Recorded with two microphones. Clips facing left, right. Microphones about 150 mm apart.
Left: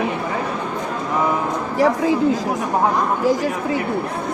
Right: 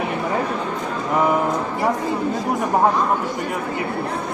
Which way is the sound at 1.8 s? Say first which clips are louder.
Left 8 dB; 90° left.